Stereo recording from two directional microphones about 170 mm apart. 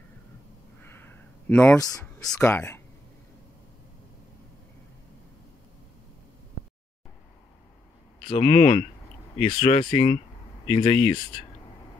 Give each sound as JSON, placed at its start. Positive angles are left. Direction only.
{"t": 0.8, "sound": "a sound", "side_deg": 15}
{"t": 2.0, "sound": "speech", "side_deg": 5}
{"t": 2.4, "sound": "speech", "side_deg": 15}
{"t": 8.3, "sound": "speech", "side_deg": 40}